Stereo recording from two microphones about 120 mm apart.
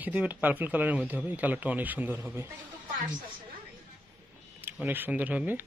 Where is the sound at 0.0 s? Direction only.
15° right (ahead or behind).